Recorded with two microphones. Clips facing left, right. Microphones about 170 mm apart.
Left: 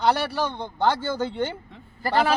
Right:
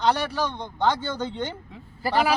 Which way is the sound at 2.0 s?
5° right (ahead or behind).